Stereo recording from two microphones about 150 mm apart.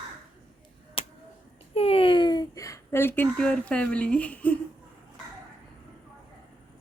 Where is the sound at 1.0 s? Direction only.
40° left (ahead or behind); by 4.5 s 10° left (ahead or behind).